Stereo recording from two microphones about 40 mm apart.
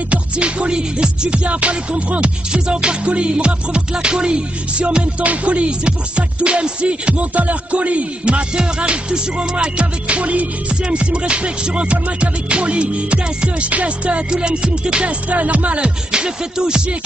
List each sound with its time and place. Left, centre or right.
0.1 s music: right
15.2 s music: right
16.1 s music: right